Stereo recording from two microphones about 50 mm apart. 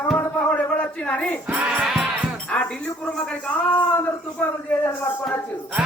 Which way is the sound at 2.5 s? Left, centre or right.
Left.